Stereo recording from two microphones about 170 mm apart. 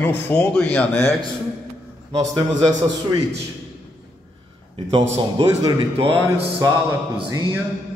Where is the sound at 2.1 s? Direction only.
25° right (ahead or behind).